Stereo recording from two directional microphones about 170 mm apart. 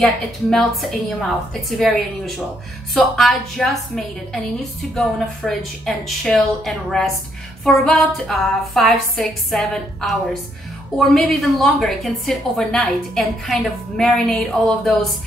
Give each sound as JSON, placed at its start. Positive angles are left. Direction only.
{"t": 0.0, "sound": "a woman's voice", "side_deg": 0}